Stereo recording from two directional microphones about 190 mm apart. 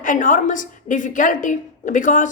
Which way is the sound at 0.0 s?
45° left (ahead or behind).